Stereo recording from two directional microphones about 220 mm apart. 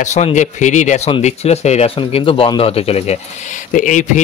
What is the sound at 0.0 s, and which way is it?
A man's voice, 30° left (ahead or behind).